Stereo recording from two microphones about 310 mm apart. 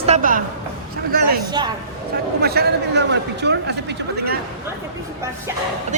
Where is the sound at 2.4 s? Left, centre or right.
Right.